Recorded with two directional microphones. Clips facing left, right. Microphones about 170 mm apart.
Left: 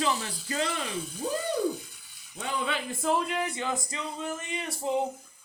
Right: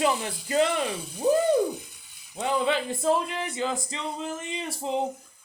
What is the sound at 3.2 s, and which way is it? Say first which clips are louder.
Speech: right 1 dB; 25° right (ahead or behind).